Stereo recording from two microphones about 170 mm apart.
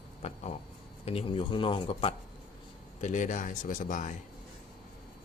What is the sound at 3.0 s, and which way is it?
Speech, 45° left (ahead or behind).